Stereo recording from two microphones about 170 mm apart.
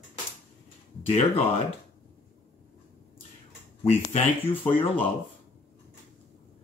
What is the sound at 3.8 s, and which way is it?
Speech, 40° left (ahead or behind).